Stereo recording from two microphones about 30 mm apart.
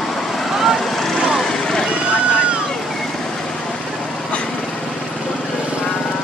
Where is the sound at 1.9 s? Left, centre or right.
Right.